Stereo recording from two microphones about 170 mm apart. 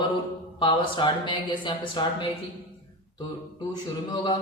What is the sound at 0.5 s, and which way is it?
A man's voice, 30° left (ahead or behind).